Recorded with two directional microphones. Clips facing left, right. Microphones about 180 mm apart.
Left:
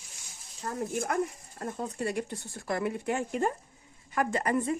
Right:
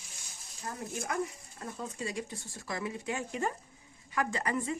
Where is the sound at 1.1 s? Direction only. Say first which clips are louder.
Left 4 dB; 50° left (ahead or behind).